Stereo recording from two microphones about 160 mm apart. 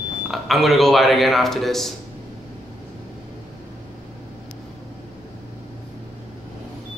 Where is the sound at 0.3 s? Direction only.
Centre (ahead or behind).